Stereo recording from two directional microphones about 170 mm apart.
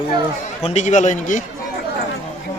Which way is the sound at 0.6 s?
40° left (ahead or behind).